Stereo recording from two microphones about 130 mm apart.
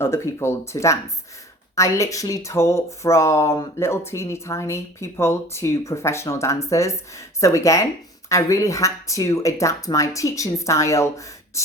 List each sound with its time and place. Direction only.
0.0 s speech: 20° left (ahead or behind)